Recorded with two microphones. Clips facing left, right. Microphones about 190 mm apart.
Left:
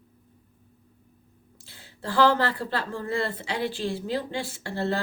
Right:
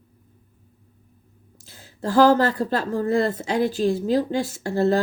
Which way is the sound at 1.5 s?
45° right (ahead or behind).